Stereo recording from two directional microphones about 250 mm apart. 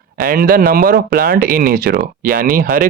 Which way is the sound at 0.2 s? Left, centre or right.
Right.